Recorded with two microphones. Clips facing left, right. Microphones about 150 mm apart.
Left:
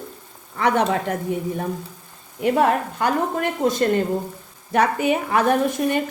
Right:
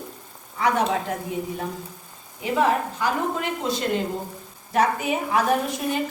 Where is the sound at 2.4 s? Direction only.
55° left (ahead or behind).